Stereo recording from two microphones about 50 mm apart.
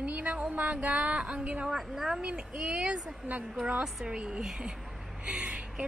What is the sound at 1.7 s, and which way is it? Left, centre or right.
Speech, centre.